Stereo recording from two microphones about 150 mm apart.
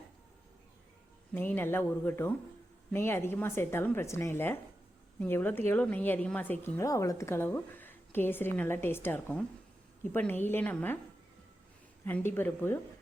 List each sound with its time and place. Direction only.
1.3 s a woman's voice: 15° left (ahead or behind)
12.0 s a woman's voice: 15° left (ahead or behind)